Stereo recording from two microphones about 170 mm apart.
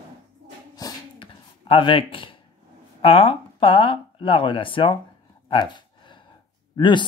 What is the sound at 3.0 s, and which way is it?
Speech, 35° left (ahead or behind).